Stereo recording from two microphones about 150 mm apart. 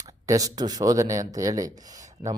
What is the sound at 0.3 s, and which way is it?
Speech, 25° right (ahead or behind).